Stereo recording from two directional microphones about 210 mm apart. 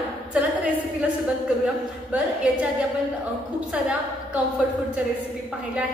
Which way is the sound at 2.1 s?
5° right (ahead or behind).